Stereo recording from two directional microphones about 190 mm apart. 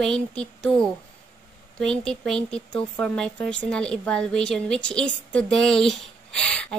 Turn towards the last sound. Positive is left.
turn(degrees=5)  # may be behind; listen again after turning